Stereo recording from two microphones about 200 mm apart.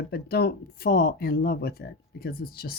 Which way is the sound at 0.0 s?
50° left (ahead or behind).